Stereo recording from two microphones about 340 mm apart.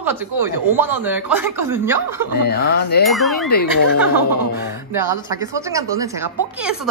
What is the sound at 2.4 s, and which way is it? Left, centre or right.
Speech, left.